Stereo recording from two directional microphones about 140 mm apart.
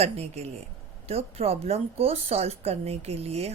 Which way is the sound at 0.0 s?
50° right (ahead or behind).